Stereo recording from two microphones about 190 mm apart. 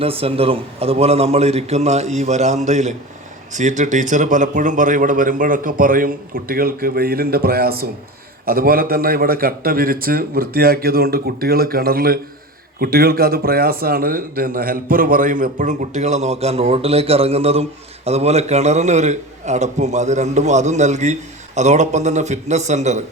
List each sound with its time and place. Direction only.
0.0 s a man's voice: 30° right (ahead or behind)